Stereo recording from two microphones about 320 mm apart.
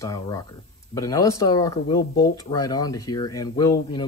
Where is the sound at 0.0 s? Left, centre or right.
Centre.